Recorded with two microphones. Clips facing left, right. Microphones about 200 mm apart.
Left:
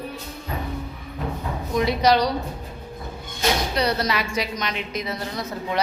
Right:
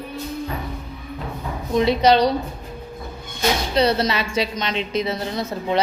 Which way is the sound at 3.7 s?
25° right (ahead or behind).